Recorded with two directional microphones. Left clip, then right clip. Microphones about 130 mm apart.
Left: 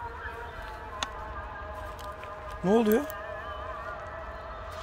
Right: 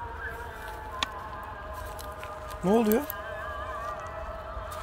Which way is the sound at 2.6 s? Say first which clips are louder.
Even; 30° left (ahead or behind).